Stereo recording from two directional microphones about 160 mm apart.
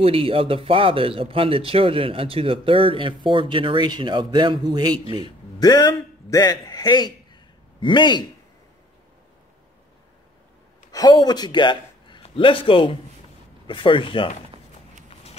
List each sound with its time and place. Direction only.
0.0 s speech: 35° right (ahead or behind)
5.2 s a man's voice: 25° left (ahead or behind)
10.9 s a man's voice: 25° left (ahead or behind)